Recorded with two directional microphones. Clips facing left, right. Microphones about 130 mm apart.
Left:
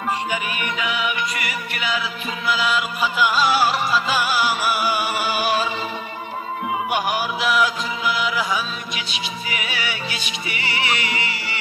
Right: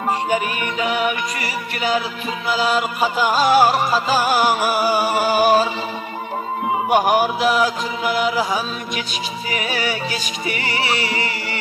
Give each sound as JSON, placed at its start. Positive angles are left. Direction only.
{"t": 0.3, "sound": "music", "side_deg": -40}
{"t": 6.9, "sound": "music", "side_deg": -45}